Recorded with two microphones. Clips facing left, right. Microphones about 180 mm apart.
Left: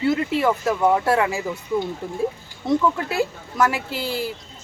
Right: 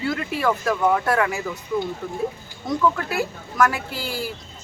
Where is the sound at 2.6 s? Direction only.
25° left (ahead or behind).